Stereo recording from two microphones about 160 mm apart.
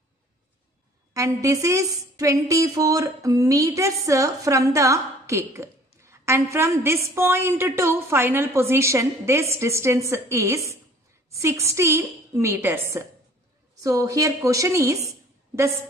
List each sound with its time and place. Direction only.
1.1 s a woman's voice: 20° right (ahead or behind)